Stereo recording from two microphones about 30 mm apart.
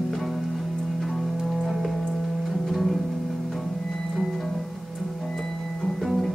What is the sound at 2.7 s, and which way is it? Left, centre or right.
Music, centre.